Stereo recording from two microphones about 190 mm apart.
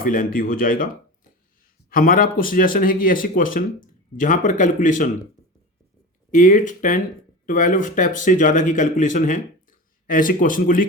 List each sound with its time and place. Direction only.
0.0 s speech: 45° left (ahead or behind)
1.9 s speech: 50° left (ahead or behind)
6.3 s speech: 45° left (ahead or behind)